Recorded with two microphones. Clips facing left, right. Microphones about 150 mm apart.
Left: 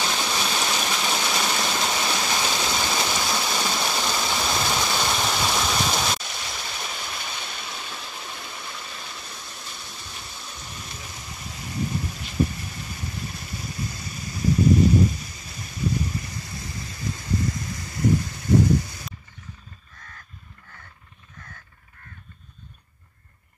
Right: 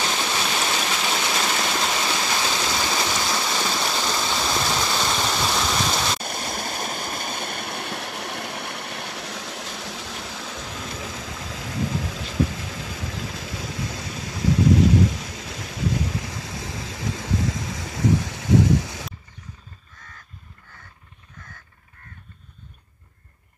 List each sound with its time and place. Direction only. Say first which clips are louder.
0.0 s a sound: right 1 dB; 5° right (ahead or behind)
3.1 s stream: right 1 dB; 5° left (ahead or behind)
6.2 s stream: right 6 dB; 50° right (ahead or behind); by 19.0 s 90° right